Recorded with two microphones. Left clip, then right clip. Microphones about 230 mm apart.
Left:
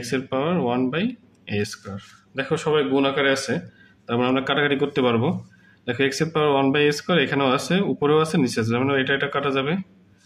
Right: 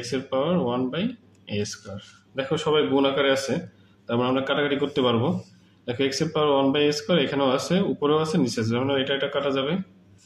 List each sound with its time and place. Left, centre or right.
0.0 s speech: left
2.3 s speech: left